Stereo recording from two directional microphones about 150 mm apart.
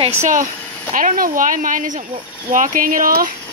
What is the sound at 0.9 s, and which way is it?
Speech, 60° right (ahead or behind).